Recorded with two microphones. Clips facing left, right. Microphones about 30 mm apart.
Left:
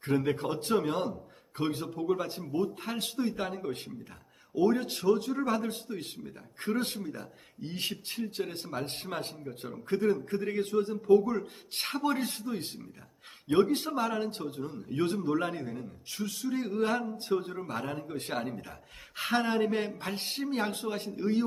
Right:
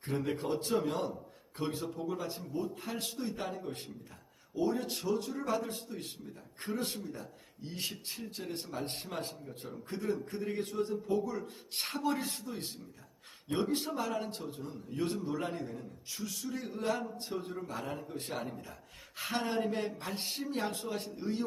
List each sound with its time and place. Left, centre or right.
0.1 s a man's voice: left
0.5 s speech: left
0.9 s a man's voice: left
4.8 s a man's voice: left
6.7 s a man's voice: left
13.9 s a man's voice: left